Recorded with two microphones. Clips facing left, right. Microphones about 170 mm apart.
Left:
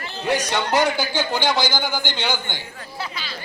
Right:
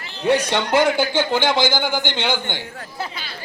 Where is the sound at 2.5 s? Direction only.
50° right (ahead or behind).